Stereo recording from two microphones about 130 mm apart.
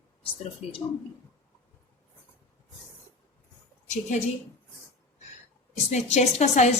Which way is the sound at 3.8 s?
65° left (ahead or behind).